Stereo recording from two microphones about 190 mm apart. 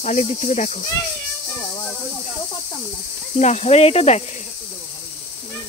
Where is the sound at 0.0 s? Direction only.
40° left (ahead or behind).